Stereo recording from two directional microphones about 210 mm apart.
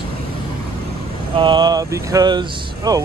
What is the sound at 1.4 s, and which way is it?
Speech, 20° right (ahead or behind).